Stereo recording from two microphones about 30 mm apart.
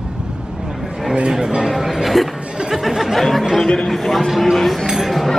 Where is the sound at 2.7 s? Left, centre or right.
Centre.